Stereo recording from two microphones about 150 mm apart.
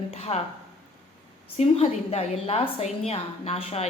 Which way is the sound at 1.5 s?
40° left (ahead or behind).